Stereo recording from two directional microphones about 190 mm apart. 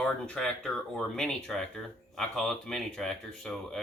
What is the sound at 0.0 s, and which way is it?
Speech, 5° left (ahead or behind).